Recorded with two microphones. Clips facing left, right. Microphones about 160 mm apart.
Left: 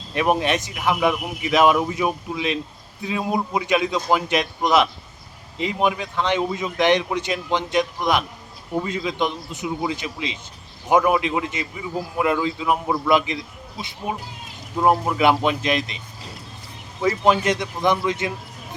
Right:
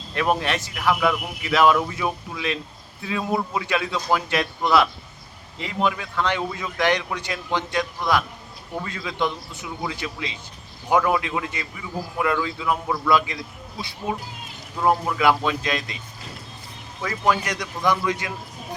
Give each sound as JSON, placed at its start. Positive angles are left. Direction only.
{"t": 0.1, "sound": "a man's voice", "side_deg": 20}
{"t": 17.0, "sound": "speech", "side_deg": 20}